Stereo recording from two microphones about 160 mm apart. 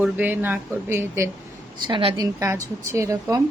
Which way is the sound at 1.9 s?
30° right (ahead or behind).